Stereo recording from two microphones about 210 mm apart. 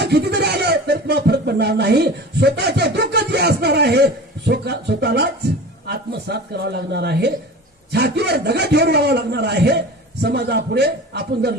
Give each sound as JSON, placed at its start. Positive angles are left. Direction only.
{"t": 0.0, "sound": "speech", "side_deg": -50}